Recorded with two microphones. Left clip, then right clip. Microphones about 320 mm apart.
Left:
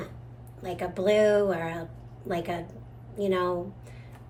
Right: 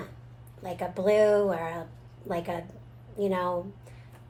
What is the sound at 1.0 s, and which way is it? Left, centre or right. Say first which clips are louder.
Speech: even; centre.